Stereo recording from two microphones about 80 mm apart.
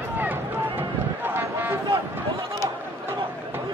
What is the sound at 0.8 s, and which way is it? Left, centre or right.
Run, right.